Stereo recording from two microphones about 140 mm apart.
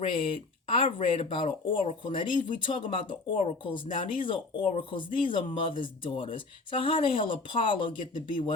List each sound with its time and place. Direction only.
0.0 s speech: 40° left (ahead or behind)
1.7 s speech: 55° left (ahead or behind)
2.0 s speech: 35° left (ahead or behind)